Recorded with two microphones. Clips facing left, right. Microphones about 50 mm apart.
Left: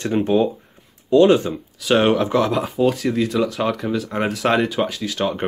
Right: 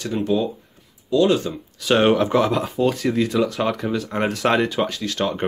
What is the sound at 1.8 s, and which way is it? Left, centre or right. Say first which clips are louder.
Speech: even; centre.